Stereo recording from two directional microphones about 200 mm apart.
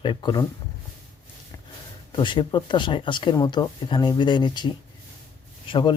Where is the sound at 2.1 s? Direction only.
25° left (ahead or behind).